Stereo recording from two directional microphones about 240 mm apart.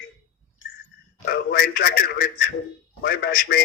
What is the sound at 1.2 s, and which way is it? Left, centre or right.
Speech, left.